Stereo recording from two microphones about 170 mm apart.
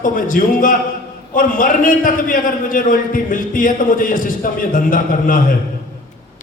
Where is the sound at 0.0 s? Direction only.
50° left (ahead or behind).